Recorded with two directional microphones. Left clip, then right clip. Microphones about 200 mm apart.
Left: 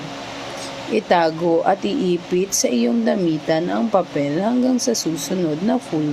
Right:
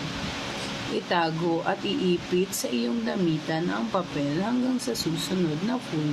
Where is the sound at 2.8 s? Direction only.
30° left (ahead or behind).